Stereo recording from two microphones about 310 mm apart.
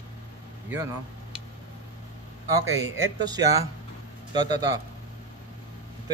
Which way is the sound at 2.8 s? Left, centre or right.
Centre.